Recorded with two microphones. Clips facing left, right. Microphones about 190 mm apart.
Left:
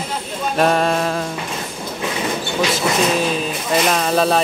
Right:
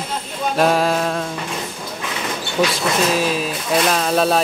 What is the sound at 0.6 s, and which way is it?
Speech, centre (ahead or behind).